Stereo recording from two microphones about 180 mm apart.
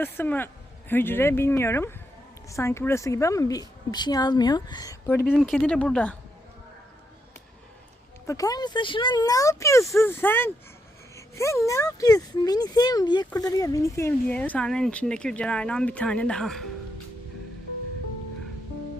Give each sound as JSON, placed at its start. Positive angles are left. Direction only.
{"t": 0.0, "sound": "speech", "side_deg": 10}
{"t": 5.3, "sound": "speech", "side_deg": 0}
{"t": 8.3, "sound": "speech", "side_deg": 20}